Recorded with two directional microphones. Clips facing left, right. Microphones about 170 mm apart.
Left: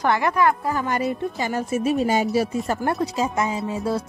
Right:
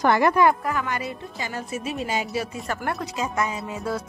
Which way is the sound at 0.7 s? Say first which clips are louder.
Left 4 dB; 40° left (ahead or behind).